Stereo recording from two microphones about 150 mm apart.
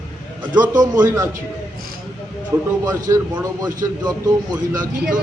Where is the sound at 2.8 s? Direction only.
25° right (ahead or behind).